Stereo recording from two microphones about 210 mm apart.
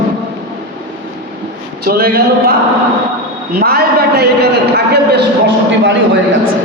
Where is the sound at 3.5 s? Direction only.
45° right (ahead or behind).